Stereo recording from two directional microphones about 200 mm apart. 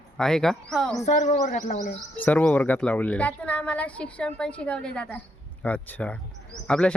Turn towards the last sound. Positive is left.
turn(degrees=5)  # may be behind; listen again after turning